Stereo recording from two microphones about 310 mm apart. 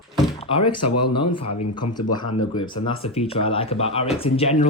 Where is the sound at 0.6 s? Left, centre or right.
Left.